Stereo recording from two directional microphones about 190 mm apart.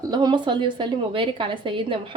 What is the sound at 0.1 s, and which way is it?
A woman's voice, 25° right (ahead or behind).